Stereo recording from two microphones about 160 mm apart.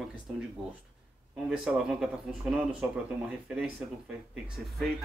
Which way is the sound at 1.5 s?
Centre (ahead or behind).